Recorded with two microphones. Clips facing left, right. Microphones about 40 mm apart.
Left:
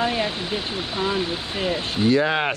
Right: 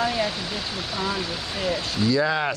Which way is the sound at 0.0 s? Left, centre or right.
Left.